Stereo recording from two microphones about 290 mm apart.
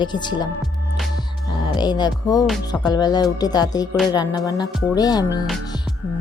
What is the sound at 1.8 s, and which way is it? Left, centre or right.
Speech, centre.